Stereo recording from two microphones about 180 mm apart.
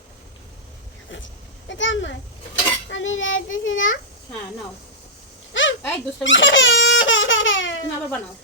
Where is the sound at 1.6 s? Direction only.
90° left.